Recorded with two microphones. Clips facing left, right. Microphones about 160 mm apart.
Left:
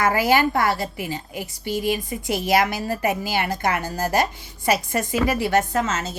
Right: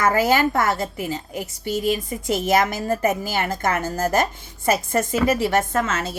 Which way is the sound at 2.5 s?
45° right (ahead or behind).